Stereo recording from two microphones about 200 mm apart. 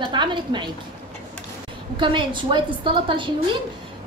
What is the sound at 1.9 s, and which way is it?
A woman's voice, 25° right (ahead or behind).